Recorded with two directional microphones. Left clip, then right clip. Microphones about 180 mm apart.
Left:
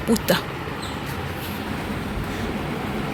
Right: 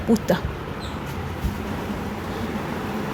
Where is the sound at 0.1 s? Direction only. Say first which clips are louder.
Even; 10° right (ahead or behind).